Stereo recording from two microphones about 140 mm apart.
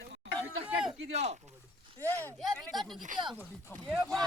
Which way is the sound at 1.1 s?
50° right (ahead or behind).